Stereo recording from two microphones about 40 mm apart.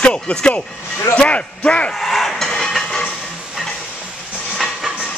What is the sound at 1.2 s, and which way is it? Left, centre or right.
Speech, left.